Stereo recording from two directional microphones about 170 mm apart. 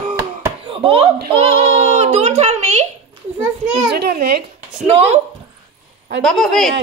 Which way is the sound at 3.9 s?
65° right (ahead or behind).